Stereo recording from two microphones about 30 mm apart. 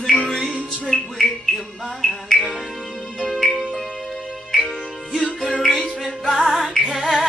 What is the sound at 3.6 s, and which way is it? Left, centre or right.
Music, left.